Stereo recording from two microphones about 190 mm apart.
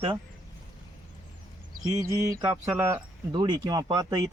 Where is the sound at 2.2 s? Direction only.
20° right (ahead or behind).